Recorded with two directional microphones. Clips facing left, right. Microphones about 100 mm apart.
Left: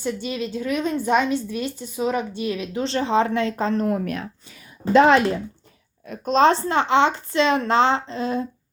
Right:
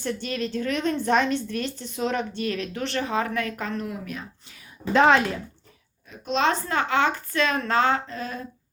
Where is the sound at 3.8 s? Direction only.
55° left (ahead or behind).